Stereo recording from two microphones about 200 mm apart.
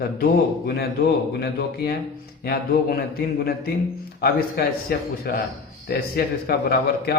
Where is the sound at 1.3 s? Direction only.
50° left (ahead or behind).